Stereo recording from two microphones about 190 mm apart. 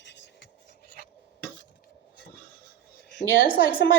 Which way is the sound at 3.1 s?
60° left (ahead or behind).